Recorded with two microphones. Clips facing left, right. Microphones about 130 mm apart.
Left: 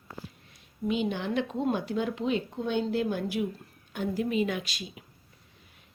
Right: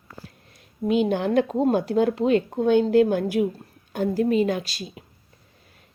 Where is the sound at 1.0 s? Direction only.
45° right (ahead or behind).